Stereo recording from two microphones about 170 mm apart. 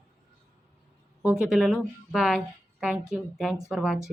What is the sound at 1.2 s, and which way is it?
A woman's voice, 5° right (ahead or behind).